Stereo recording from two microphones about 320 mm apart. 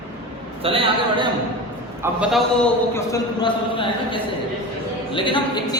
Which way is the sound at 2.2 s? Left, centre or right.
Centre.